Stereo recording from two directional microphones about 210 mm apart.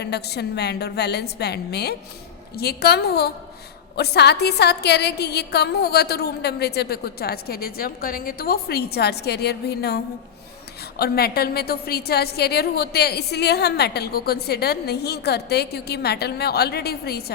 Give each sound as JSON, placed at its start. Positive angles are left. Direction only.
{"t": 0.0, "sound": "a woman's voice", "side_deg": 50}